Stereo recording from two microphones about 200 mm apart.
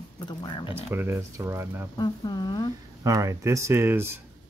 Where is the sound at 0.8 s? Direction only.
10° right (ahead or behind).